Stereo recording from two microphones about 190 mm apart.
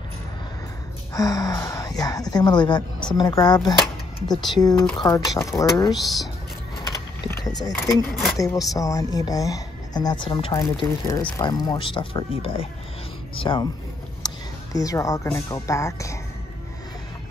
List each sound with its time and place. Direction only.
1.1 s speech: 20° left (ahead or behind)
7.4 s speech: 20° left (ahead or behind)
7.9 s speech: centre (ahead or behind)
8.7 s speech: 20° left (ahead or behind)